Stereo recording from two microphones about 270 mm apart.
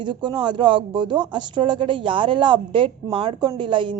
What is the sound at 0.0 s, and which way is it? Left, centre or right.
Speech, centre.